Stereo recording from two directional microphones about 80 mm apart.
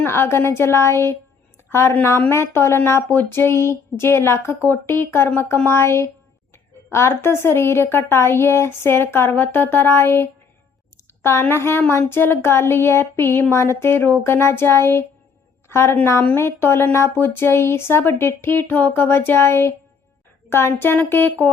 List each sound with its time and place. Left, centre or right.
0.0 s a woman's voice: left